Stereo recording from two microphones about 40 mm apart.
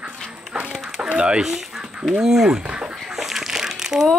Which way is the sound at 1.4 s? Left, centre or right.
Centre.